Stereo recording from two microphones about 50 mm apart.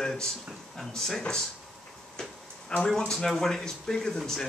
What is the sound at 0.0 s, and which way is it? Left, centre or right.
Speech, centre.